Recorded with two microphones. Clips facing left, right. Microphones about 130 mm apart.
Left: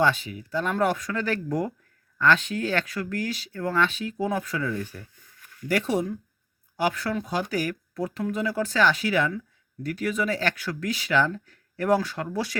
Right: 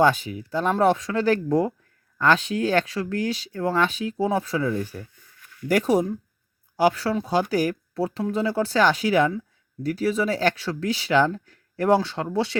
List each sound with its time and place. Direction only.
0.0 s speech: 40° right (ahead or behind)